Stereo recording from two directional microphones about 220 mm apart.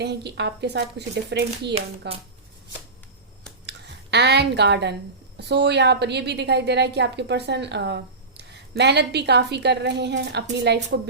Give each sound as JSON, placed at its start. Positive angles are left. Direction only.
{"t": 0.0, "sound": "a woman's voice", "side_deg": -50}
{"t": 3.7, "sound": "a woman's voice", "side_deg": -50}